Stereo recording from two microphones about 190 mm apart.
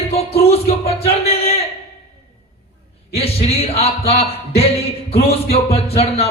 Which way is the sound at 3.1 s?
30° left (ahead or behind).